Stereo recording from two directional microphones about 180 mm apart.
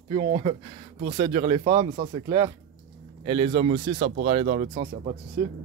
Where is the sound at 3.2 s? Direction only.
25° right (ahead or behind).